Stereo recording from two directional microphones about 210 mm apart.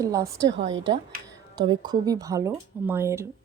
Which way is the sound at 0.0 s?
15° right (ahead or behind).